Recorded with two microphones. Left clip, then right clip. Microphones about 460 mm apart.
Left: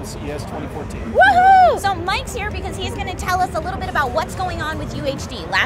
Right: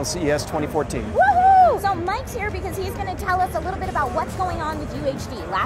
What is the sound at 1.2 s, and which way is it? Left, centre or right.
Speech, centre.